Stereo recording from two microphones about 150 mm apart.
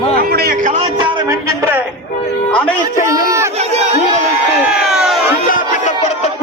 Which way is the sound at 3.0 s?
20° right (ahead or behind).